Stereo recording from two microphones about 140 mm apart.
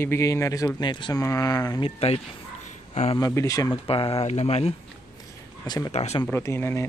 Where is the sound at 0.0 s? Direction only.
20° left (ahead or behind); by 3.2 s 55° left (ahead or behind).